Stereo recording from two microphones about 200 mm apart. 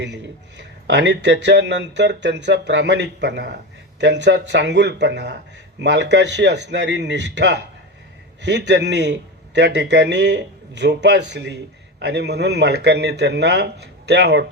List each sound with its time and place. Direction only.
0.0 s speech: 60° right (ahead or behind)